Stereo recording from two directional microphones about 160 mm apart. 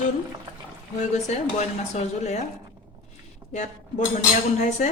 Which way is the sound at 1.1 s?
45° left (ahead or behind).